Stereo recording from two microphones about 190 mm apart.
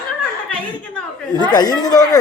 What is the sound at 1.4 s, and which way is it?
Speech, 20° left (ahead or behind).